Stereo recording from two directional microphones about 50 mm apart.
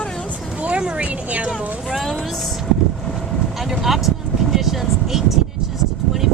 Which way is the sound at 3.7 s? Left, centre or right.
Centre.